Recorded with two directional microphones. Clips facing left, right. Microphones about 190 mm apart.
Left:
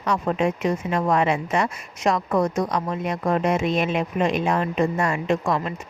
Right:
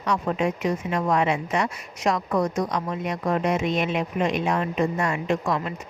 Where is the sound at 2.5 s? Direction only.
30° left (ahead or behind).